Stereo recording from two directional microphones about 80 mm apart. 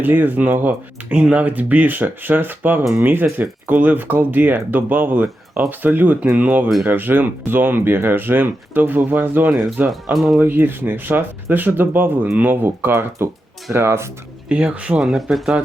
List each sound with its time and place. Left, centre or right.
0.0 s speech: right
9.5 s speech: centre
10.4 s speech: right
14.5 s speech: centre